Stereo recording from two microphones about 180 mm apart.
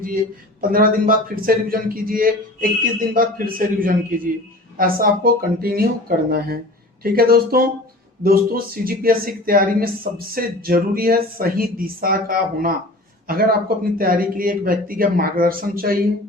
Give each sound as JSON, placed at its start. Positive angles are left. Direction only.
{"t": 0.7, "sound": "speech", "side_deg": -50}